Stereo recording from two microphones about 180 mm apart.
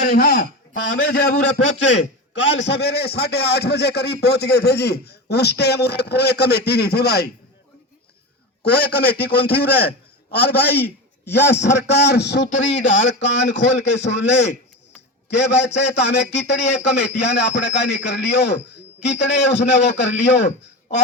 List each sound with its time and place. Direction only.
0.0 s speech: 55° left (ahead or behind)
2.6 s speech: 70° left (ahead or behind)
8.6 s a man's voice: 65° left (ahead or behind)
12.6 s a man's voice: 80° left